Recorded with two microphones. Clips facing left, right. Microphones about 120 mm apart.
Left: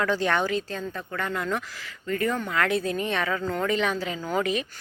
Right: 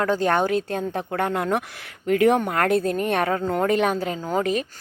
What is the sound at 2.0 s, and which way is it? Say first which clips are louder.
Speech: right 9 dB; 75° right (ahead or behind).